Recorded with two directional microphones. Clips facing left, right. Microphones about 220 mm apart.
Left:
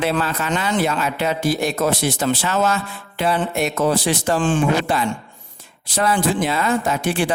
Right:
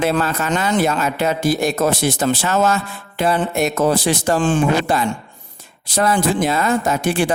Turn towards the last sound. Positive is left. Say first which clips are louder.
# right 2 dB
turn(degrees=-45)  # may be behind; listen again after turning